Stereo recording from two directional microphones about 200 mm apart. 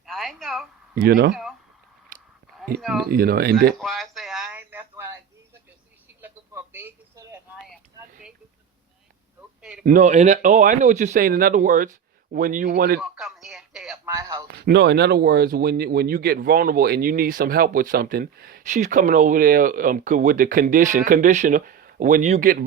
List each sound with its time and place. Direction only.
0.0 s a sound: centre (ahead or behind)
1.0 s speech: 50° right (ahead or behind)
3.1 s speech: 50° right (ahead or behind)
3.8 s a sound: centre (ahead or behind)
6.2 s telephone: 10° right (ahead or behind)
9.6 s speech: 5° right (ahead or behind)
9.8 s speech: 40° right (ahead or behind)
13.0 s speech: centre (ahead or behind)
14.0 s a man's voice: 15° right (ahead or behind)
14.4 s speech: 55° right (ahead or behind)